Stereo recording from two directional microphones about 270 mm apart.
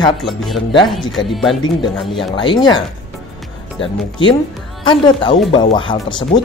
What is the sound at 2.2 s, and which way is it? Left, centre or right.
Speech, centre.